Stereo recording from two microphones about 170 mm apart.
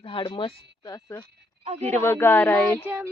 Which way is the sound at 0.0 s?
30° left (ahead or behind).